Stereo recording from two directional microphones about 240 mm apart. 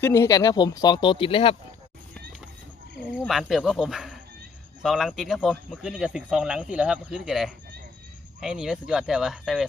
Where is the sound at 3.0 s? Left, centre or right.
Centre.